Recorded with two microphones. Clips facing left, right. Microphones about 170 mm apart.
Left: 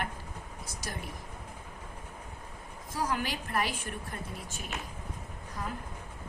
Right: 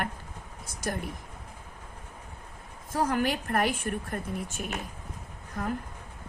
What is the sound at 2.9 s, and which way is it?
A woman's voice, 55° right (ahead or behind).